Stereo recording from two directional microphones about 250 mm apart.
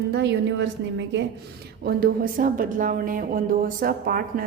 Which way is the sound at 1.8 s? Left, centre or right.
Right.